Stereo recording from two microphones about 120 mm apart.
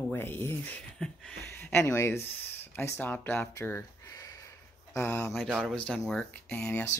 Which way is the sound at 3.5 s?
20° left (ahead or behind).